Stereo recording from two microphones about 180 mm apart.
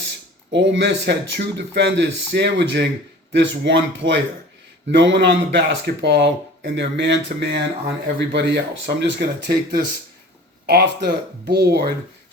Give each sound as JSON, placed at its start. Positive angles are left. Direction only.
{"t": 0.5, "sound": "speech", "side_deg": -85}